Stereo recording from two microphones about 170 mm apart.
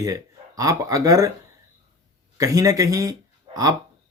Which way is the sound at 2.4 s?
20° right (ahead or behind).